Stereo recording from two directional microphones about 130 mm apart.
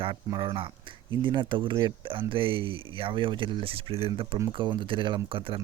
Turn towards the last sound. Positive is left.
turn(degrees=-45)  # may be behind; listen again after turning